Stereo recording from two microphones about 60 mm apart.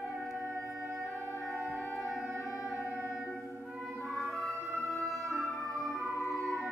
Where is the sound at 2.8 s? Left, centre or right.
Right.